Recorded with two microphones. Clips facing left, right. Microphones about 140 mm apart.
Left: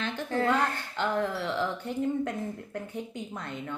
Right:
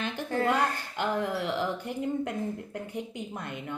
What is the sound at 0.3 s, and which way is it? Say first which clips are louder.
A woman's voice: even; 10° right (ahead or behind).